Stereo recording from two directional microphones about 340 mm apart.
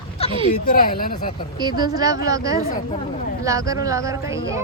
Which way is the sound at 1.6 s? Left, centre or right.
Centre.